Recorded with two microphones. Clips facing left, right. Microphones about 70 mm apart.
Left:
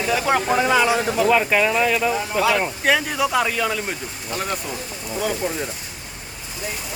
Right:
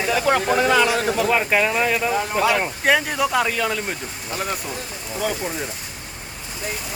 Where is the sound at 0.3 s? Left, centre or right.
Centre.